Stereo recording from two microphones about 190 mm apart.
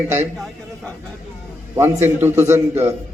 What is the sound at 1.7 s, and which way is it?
A man's voice, 15° right (ahead or behind).